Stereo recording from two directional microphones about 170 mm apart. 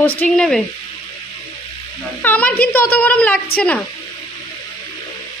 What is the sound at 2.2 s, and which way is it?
A woman's voice, 10° left (ahead or behind).